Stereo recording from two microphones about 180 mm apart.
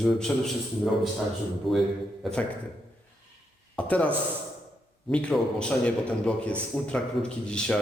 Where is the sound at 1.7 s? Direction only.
Centre (ahead or behind).